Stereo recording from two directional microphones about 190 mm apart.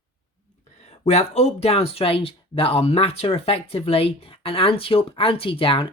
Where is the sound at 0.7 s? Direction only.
35° left (ahead or behind).